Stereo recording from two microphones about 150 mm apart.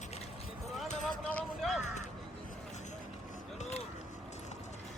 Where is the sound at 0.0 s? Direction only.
45° left (ahead or behind).